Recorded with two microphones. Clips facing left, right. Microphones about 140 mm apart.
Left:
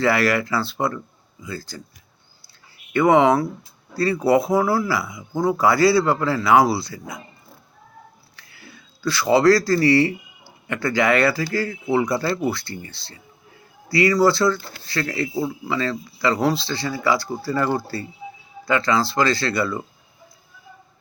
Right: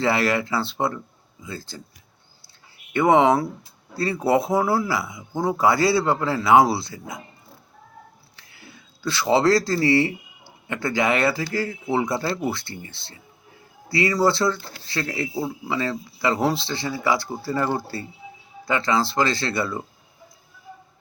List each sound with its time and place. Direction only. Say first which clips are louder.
0.0 s speech: left 2 dB; 25° right (ahead or behind)
2.9 s speech: left 1 dB; 25° right (ahead or behind)
8.4 s speech: left 1 dB; 20° right (ahead or behind)